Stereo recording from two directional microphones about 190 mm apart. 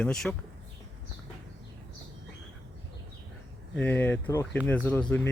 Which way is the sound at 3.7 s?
5° left (ahead or behind).